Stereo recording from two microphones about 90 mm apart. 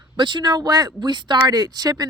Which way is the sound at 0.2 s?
60° right (ahead or behind).